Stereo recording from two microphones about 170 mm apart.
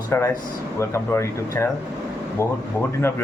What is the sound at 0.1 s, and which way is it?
Speech, 15° left (ahead or behind).